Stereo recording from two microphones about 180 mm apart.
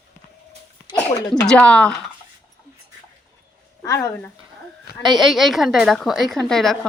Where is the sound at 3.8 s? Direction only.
20° left (ahead or behind).